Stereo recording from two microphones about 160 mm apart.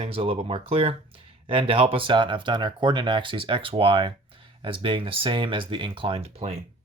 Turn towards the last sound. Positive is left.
turn(degrees=-40)  # may be behind; listen again after turning